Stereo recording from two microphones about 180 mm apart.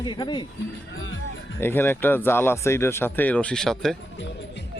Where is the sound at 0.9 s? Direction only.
90° left.